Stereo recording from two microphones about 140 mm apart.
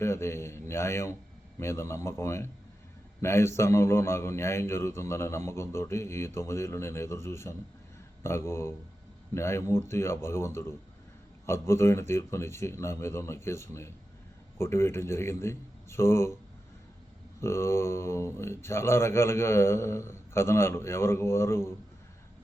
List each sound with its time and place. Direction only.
0.0 s a man's voice: 20° left (ahead or behind)
17.4 s a man's voice: 20° left (ahead or behind)